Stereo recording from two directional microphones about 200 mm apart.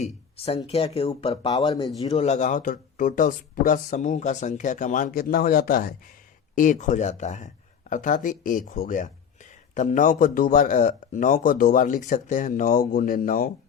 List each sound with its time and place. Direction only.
0.0 s a sound: 30° left (ahead or behind)
0.7 s speech: 30° left (ahead or behind)
2.1 s speech: 35° left (ahead or behind)